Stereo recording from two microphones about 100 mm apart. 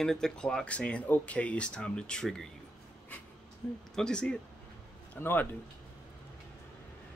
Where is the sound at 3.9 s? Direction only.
10° left (ahead or behind).